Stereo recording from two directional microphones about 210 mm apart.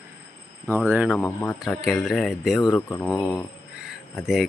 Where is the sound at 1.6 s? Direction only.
Centre (ahead or behind).